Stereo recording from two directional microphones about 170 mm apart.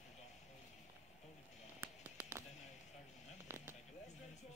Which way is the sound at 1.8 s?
15° right (ahead or behind).